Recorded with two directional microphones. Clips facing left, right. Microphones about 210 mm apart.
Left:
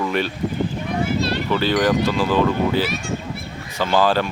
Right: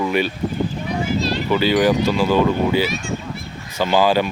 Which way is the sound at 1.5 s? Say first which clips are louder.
Right 3 dB; 5° right (ahead or behind).